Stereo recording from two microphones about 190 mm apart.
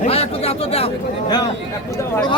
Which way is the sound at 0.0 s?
30° left (ahead or behind).